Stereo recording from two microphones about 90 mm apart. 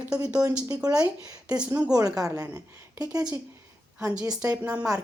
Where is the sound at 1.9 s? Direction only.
40° right (ahead or behind).